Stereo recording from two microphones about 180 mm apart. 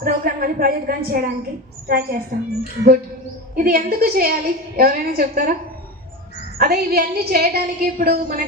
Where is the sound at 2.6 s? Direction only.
55° right (ahead or behind).